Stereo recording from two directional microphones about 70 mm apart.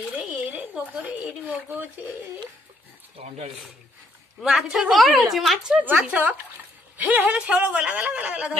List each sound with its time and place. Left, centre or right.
0.1 s a sound: right
4.4 s speech: centre
5.9 s speech: right